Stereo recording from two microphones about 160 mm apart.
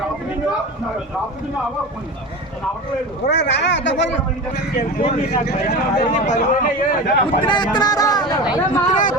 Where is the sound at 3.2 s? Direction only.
90° left.